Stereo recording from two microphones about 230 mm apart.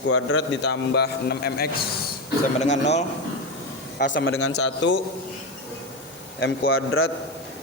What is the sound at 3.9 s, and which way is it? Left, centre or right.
A man's voice, left.